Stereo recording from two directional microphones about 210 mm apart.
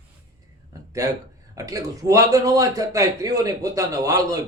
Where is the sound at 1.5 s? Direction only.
15° right (ahead or behind).